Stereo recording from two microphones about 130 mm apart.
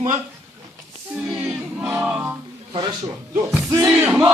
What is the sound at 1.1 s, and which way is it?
Music, 10° right (ahead or behind).